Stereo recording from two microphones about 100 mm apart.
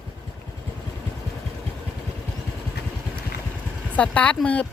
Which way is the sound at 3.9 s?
15° left (ahead or behind).